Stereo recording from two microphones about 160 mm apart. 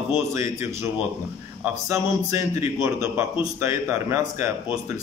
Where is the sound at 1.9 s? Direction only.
20° right (ahead or behind).